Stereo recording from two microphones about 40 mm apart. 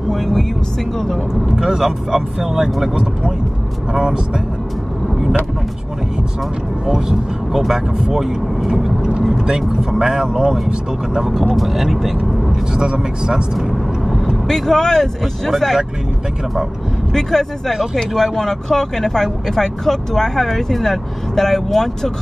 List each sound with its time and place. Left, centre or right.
0.1 s speech: centre
1.6 s speech: centre
6.9 s speech: centre
12.7 s speech: centre
14.3 s speech: centre
17.1 s speech: centre